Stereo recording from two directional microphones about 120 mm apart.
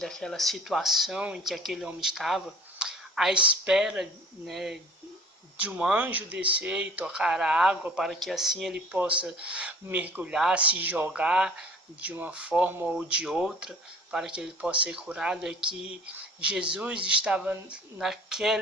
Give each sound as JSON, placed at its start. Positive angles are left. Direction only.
{"t": 0.0, "sound": "speech", "side_deg": 5}
{"t": 3.3, "sound": "speech", "side_deg": -45}
{"t": 3.6, "sound": "speech", "side_deg": -5}